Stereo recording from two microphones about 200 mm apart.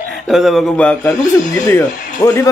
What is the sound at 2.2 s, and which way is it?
Speech, 15° left (ahead or behind).